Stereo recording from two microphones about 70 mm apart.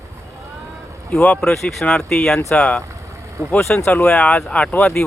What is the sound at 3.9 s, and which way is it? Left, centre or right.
Speech, centre.